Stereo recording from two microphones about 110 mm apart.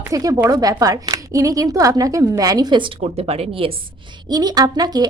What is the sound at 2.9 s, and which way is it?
Speech, 65° right (ahead or behind).